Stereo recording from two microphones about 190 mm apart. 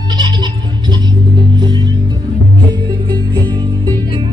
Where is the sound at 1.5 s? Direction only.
25° right (ahead or behind).